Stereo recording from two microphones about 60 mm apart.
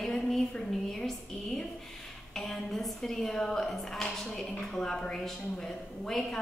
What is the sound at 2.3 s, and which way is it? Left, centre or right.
A woman's voice, centre.